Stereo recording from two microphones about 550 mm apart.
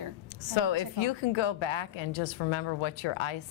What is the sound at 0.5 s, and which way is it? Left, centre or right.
A woman's voice, left.